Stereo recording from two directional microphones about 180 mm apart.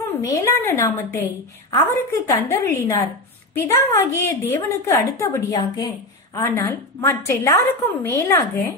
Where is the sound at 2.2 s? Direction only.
15° left (ahead or behind).